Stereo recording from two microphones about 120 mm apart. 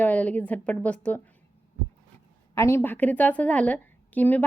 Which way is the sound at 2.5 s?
20° left (ahead or behind).